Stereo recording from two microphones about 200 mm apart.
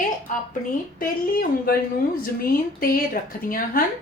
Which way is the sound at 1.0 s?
45° left (ahead or behind).